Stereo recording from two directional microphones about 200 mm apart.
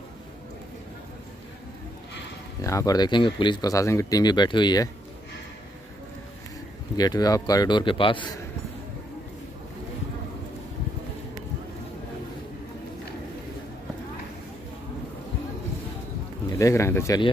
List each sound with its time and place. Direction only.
2.6 s speech: 15° left (ahead or behind)
7.0 s speech: 20° left (ahead or behind)
16.5 s speech: 15° left (ahead or behind)